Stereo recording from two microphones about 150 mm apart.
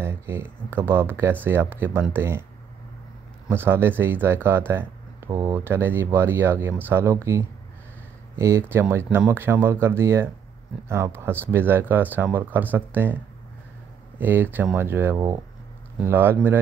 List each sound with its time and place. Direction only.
0.0 s speech: 15° right (ahead or behind)
3.4 s speech: 15° right (ahead or behind)